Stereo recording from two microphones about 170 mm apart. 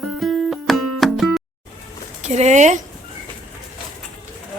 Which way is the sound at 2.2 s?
45° right (ahead or behind).